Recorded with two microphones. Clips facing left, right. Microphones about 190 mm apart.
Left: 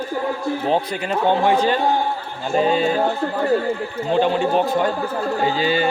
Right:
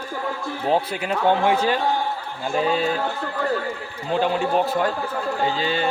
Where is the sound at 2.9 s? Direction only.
40° left (ahead or behind).